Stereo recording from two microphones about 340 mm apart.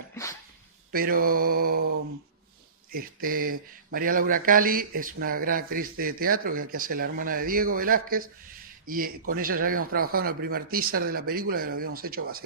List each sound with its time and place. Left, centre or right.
0.1 s a sound: centre
0.9 s speech: right
2.9 s speech: right